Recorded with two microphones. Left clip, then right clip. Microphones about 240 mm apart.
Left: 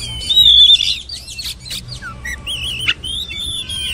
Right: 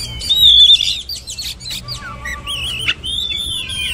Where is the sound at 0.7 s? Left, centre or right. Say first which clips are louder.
Even; centre.